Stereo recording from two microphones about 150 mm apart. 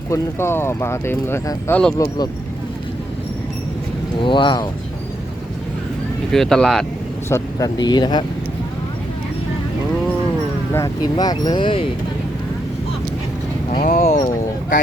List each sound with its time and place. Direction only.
0.1 s speech: 15° left (ahead or behind)
2.0 s speech: 30° left (ahead or behind)
4.2 s speech: 35° left (ahead or behind)
6.3 s speech: 5° left (ahead or behind)
7.3 s speech: 20° left (ahead or behind)
10.8 s speech: 25° left (ahead or behind)
13.7 s speech: 65° left (ahead or behind)